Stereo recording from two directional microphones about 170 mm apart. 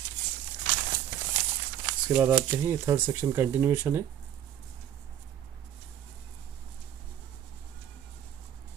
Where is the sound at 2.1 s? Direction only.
15° right (ahead or behind).